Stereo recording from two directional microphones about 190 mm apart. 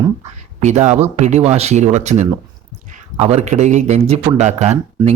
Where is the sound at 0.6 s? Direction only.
35° right (ahead or behind).